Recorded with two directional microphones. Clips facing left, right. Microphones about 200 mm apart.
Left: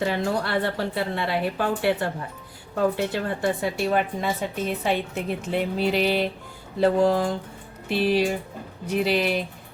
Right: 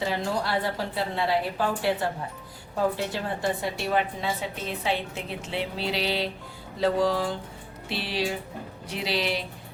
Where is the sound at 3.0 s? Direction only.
55° left (ahead or behind).